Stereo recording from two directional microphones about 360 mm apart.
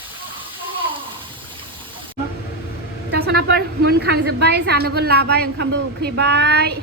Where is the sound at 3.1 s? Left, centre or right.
Right.